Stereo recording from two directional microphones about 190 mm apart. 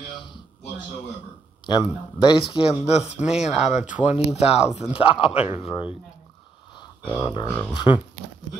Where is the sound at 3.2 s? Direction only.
5° right (ahead or behind).